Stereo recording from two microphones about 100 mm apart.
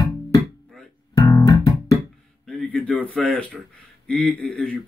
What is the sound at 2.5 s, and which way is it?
Speech, 15° left (ahead or behind).